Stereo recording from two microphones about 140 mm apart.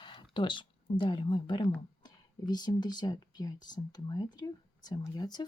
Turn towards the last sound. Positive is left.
turn(degrees=30)  # may be behind; listen again after turning